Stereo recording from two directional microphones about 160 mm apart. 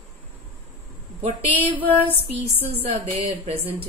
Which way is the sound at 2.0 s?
40° right (ahead or behind).